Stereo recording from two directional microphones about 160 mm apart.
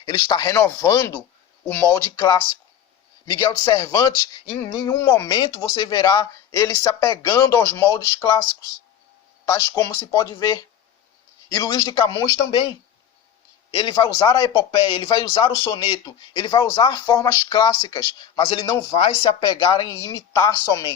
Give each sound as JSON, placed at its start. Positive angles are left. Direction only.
{"t": 0.0, "sound": "a man's voice", "side_deg": 30}
{"t": 9.5, "sound": "a man's voice", "side_deg": 20}
{"t": 13.7, "sound": "a man's voice", "side_deg": 30}